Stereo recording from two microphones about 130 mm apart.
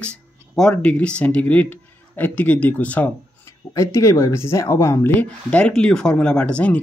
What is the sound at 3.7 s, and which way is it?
Speech, 25° left (ahead or behind).